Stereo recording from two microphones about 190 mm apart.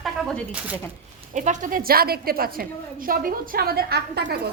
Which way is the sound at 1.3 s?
40° right (ahead or behind).